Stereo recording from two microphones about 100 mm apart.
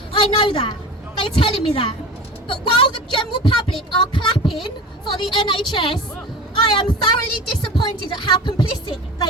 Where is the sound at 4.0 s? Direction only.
55° left (ahead or behind).